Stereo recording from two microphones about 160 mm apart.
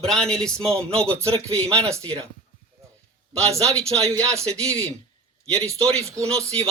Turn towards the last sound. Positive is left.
turn(degrees=-20)  # may be behind; listen again after turning